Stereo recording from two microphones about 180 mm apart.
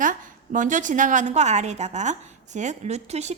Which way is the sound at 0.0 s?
45° right (ahead or behind).